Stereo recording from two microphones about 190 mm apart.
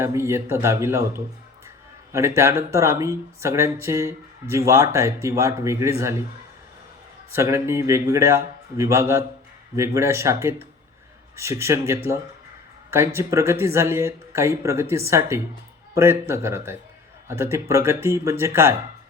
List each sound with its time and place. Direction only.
0.0 s speech: 15° right (ahead or behind)
7.3 s speech: 15° right (ahead or behind)
13.1 s speech: 15° right (ahead or behind)